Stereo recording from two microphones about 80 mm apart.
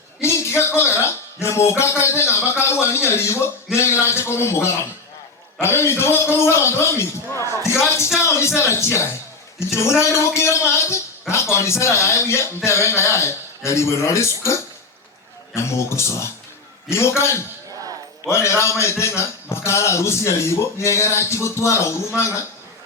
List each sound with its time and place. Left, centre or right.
0.2 s a man's voice: left